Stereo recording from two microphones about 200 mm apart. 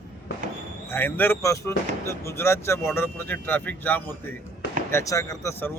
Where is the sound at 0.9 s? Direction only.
10° left (ahead or behind).